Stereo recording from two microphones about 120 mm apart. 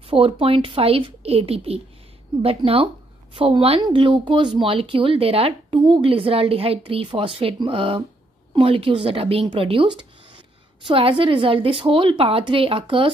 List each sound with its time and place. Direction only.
0.1 s speech: 50° right (ahead or behind)